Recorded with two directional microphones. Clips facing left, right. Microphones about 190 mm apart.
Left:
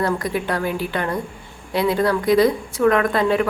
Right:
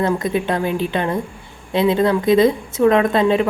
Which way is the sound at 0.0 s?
25° right (ahead or behind).